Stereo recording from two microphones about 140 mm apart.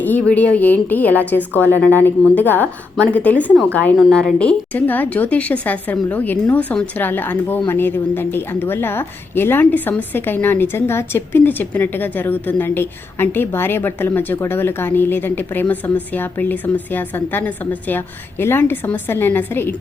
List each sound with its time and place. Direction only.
0.0 s a woman's voice: 10° left (ahead or behind)